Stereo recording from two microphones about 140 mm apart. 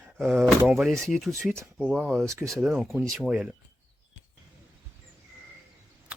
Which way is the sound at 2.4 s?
Centre (ahead or behind).